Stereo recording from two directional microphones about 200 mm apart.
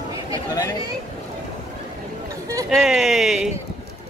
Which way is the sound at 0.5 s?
20° left (ahead or behind).